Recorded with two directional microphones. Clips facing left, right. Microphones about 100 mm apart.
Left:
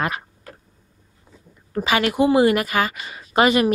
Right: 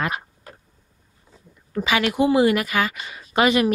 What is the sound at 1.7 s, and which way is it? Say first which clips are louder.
A woman's voice: left 1 dB; 40° left (ahead or behind).